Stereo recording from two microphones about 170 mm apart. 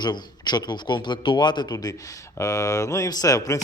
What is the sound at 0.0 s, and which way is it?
A man's voice, 25° left (ahead or behind).